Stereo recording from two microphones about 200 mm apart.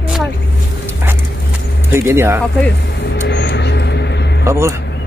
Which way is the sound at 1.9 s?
10° right (ahead or behind).